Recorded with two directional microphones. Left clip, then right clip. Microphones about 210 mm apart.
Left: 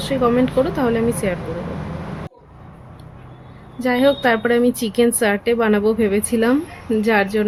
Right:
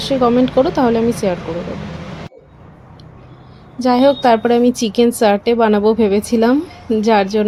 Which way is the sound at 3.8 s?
10° right (ahead or behind).